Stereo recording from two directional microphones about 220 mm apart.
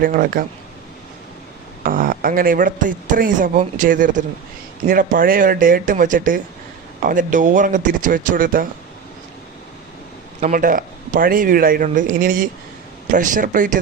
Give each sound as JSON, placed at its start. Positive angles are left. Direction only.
{"t": 0.0, "sound": "speech", "side_deg": -40}
{"t": 1.8, "sound": "speech", "side_deg": -40}
{"t": 10.4, "sound": "speech", "side_deg": -40}